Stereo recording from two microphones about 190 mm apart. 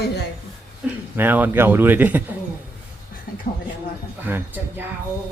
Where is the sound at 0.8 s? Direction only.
5° right (ahead or behind).